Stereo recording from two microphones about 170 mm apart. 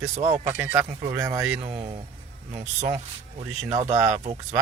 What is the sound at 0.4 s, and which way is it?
A man's voice, 10° right (ahead or behind).